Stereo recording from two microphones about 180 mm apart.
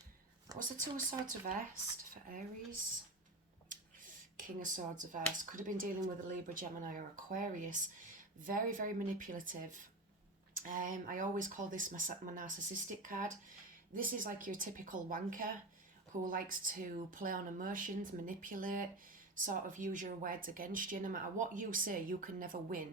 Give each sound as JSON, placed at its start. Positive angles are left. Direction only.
{"t": 0.5, "sound": "a sound", "side_deg": -20}
{"t": 1.3, "sound": "speech", "side_deg": -50}
{"t": 3.7, "sound": "speech", "side_deg": -45}